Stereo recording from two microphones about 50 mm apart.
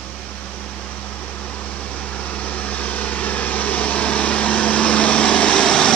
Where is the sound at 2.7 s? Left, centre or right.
Left.